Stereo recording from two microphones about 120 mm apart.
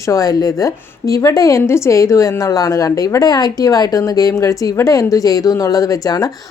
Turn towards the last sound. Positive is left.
turn(degrees=30)  # may be behind; listen again after turning